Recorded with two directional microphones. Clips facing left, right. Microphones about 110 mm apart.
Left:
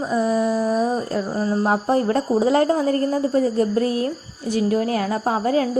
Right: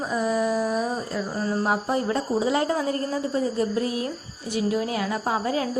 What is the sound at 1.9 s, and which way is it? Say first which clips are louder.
A woman's voice: left 5 dB; 45° left (ahead or behind).